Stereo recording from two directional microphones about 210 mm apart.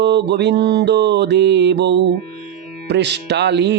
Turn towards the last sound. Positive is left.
turn(degrees=-55)  # may be behind; listen again after turning